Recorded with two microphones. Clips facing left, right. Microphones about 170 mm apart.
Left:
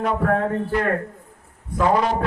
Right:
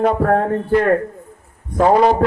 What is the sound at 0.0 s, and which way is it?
Music, 45° right (ahead or behind).